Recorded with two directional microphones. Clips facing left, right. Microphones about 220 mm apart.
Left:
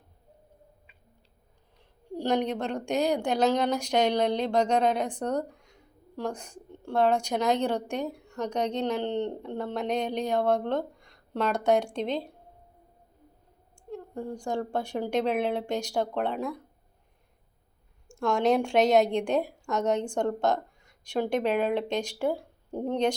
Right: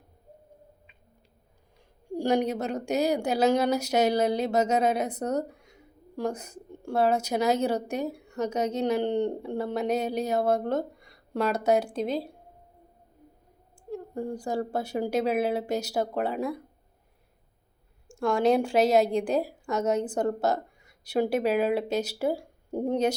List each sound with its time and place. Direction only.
2.0 s a woman's voice: 10° right (ahead or behind)
13.9 s a woman's voice: 10° right (ahead or behind)
18.1 s a woman's voice: centre (ahead or behind)